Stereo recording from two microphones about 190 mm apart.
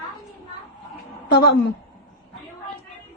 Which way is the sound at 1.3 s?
60° left (ahead or behind).